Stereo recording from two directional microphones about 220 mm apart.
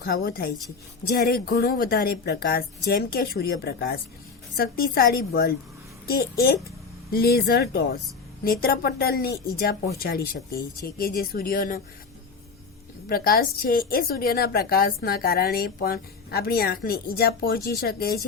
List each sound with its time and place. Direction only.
0.0 s a woman's voice: 45° left (ahead or behind)
7.1 s a woman's voice: 45° left (ahead or behind)
13.1 s a woman's voice: 40° left (ahead or behind)